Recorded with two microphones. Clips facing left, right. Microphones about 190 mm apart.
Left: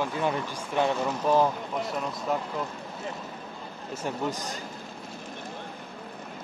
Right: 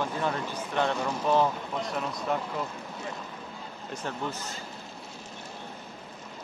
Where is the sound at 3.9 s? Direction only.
15° left (ahead or behind).